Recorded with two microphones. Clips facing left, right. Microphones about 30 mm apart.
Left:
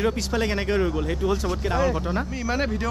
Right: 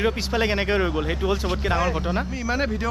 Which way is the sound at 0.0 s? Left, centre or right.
Right.